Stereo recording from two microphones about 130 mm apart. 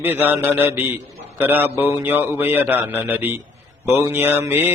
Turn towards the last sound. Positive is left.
turn(degrees=-15)  # may be behind; listen again after turning